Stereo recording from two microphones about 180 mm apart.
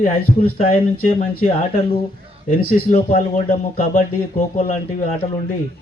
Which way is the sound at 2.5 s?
40° left (ahead or behind).